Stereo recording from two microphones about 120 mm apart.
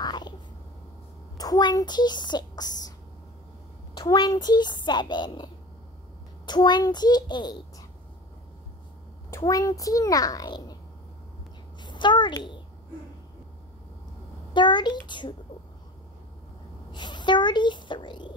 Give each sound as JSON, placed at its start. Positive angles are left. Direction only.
{"t": 0.0, "sound": "a sound", "side_deg": 35}
{"t": 1.4, "sound": "speech", "side_deg": 35}
{"t": 4.1, "sound": "speech", "side_deg": 35}
{"t": 9.4, "sound": "a child's voice", "side_deg": 30}
{"t": 11.8, "sound": "a sound", "side_deg": 40}
{"t": 14.5, "sound": "speech", "side_deg": 40}
{"t": 16.9, "sound": "speech", "side_deg": 40}